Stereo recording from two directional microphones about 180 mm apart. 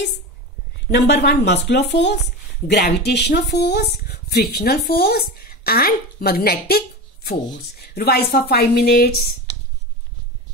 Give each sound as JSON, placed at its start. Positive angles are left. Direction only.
{"t": 0.9, "sound": "a woman's voice", "side_deg": 70}
{"t": 7.8, "sound": "speech", "side_deg": 60}